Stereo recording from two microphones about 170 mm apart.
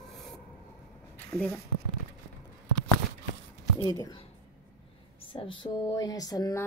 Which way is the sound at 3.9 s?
25° left (ahead or behind).